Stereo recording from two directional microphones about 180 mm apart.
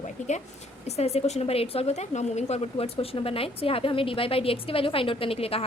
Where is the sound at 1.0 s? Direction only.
35° left (ahead or behind).